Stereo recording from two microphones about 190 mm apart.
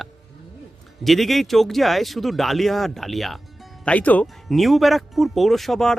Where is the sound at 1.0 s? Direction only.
Centre (ahead or behind).